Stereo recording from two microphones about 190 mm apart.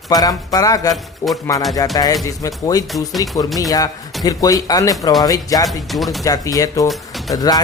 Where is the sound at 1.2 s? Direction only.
15° left (ahead or behind).